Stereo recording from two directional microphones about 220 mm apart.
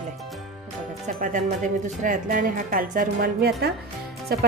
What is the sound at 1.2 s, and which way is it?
Speech, 35° right (ahead or behind).